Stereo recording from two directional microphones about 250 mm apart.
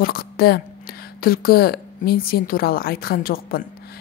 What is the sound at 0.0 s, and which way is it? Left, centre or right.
A woman's voice, left.